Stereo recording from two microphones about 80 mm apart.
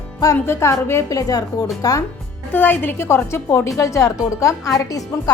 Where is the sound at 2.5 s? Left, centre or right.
Left.